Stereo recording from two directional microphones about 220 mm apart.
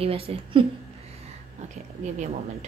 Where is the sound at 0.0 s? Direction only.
25° right (ahead or behind).